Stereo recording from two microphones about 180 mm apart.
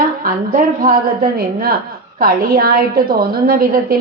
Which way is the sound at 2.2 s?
55° right (ahead or behind).